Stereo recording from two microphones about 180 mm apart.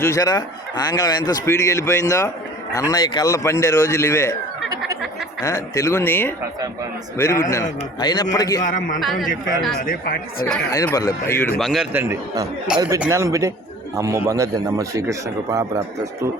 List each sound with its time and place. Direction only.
0.0 s a man's voice: 15° left (ahead or behind)
5.4 s a man's voice: 15° left (ahead or behind)
8.6 s speech: 45° left (ahead or behind)
9.0 s a man's voice: centre (ahead or behind)
9.8 s speech: 55° left (ahead or behind)
10.7 s a man's voice: 20° left (ahead or behind); by 15.8 s 20° right (ahead or behind)